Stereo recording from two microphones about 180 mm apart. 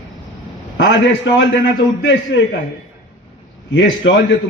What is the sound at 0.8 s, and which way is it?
A man's voice, 90° left.